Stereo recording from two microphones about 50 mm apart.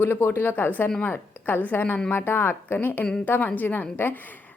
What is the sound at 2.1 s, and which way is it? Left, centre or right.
Speech, left.